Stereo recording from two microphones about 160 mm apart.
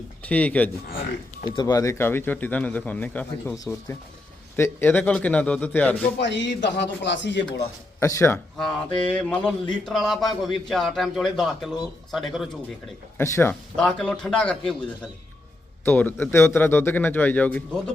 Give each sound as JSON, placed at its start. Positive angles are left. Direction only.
{"t": 0.3, "sound": "speech", "side_deg": 10}
{"t": 1.5, "sound": "speech", "side_deg": 20}
{"t": 4.5, "sound": "speech", "side_deg": 15}
{"t": 6.1, "sound": "a man's voice", "side_deg": 90}
{"t": 7.9, "sound": "speech", "side_deg": 20}
{"t": 8.5, "sound": "speech", "side_deg": 5}
{"t": 9.9, "sound": "a man's voice", "side_deg": 0}
{"t": 13.1, "sound": "speech", "side_deg": 15}
{"t": 15.8, "sound": "speech", "side_deg": 10}